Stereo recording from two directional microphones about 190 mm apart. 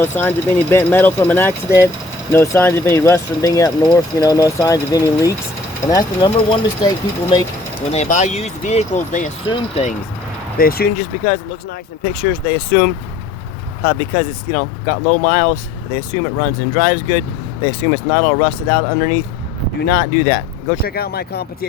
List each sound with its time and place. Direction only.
0.0 s speech: 10° left (ahead or behind)
7.9 s speech: 40° left (ahead or behind)
10.6 s speech: 50° left (ahead or behind)
16.8 s speech: 40° left (ahead or behind)